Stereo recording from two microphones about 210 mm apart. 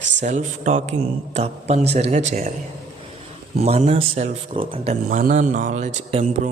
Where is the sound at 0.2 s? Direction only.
35° right (ahead or behind).